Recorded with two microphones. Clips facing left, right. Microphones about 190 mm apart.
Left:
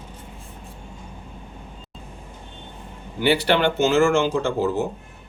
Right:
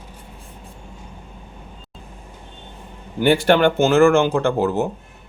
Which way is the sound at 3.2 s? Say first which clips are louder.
Right 4 dB; 50° right (ahead or behind).